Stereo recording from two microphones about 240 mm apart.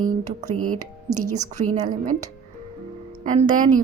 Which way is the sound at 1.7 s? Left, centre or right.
Right.